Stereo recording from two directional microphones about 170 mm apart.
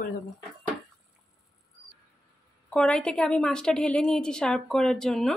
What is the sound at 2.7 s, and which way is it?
A woman's voice, 5° left (ahead or behind).